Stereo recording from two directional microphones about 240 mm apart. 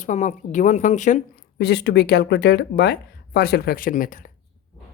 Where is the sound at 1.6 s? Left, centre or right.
Left.